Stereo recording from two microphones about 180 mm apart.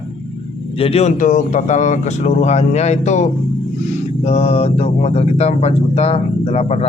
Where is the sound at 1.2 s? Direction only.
45° left (ahead or behind).